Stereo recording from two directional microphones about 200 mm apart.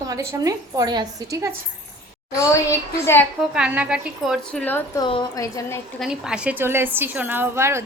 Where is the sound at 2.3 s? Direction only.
15° left (ahead or behind).